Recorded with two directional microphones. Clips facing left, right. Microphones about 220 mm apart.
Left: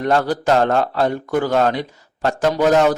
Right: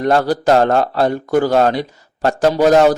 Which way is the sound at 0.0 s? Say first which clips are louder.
Right 3 dB; 40° right (ahead or behind).